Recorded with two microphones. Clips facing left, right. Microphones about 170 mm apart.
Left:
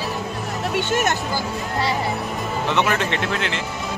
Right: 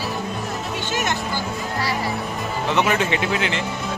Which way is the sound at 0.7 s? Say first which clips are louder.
Left 6 dB; 55° left (ahead or behind).